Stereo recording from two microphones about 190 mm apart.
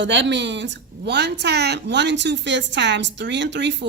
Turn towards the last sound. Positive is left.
turn(degrees=-65)  # may be behind; listen again after turning